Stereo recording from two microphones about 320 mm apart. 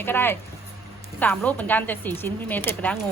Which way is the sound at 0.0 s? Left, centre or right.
Centre.